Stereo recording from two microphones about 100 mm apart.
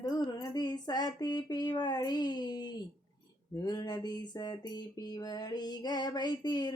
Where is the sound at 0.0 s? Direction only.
45° left (ahead or behind).